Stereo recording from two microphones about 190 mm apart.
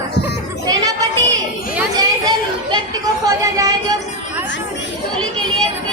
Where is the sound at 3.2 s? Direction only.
20° right (ahead or behind).